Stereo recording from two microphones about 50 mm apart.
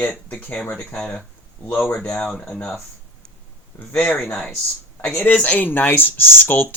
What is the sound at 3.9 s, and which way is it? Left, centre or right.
Speech, left.